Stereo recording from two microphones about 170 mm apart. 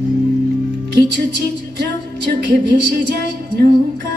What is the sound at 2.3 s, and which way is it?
Music, 75° right (ahead or behind).